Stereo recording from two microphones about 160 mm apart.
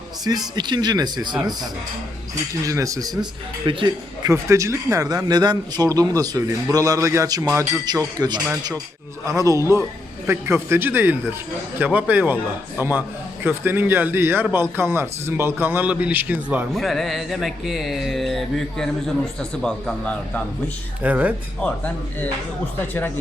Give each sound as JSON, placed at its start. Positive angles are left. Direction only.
{"t": 0.3, "sound": "speech", "side_deg": -25}
{"t": 2.6, "sound": "speech", "side_deg": -20}
{"t": 4.3, "sound": "a man's voice", "side_deg": -20}
{"t": 21.0, "sound": "a man's voice", "side_deg": -10}